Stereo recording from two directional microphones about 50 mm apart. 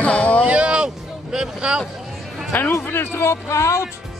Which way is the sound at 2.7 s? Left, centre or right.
Left.